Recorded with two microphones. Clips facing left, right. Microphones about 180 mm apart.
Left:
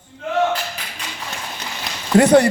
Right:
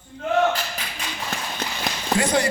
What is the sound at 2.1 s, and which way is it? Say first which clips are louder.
Speech: left 10 dB; 60° left (ahead or behind).